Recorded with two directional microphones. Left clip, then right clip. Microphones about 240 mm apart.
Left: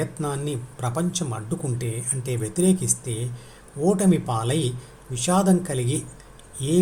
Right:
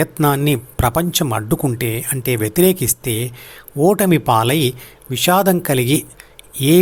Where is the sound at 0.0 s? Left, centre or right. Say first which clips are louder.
Right 12 dB; right.